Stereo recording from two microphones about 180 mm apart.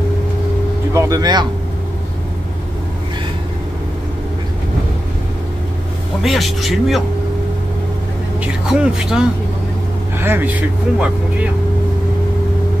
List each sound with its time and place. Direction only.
0.9 s speech: 20° right (ahead or behind)
6.2 s speech: centre (ahead or behind)
8.4 s speech: 5° right (ahead or behind)